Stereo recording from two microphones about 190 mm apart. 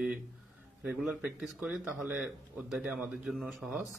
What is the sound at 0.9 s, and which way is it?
A man's voice, centre (ahead or behind).